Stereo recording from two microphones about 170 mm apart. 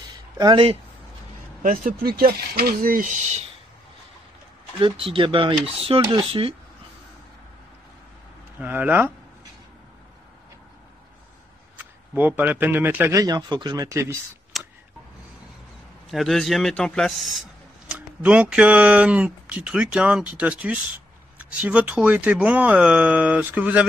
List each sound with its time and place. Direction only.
0.4 s speech: 30° right (ahead or behind)
1.6 s speech: 55° right (ahead or behind)
4.7 s speech: 30° right (ahead or behind)
8.5 s speech: 10° right (ahead or behind)
11.7 s speech: 10° right (ahead or behind)
14.5 s tick: centre (ahead or behind)
16.1 s speech: centre (ahead or behind)